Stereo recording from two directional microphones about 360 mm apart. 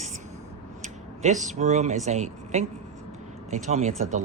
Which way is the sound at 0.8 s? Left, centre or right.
Centre.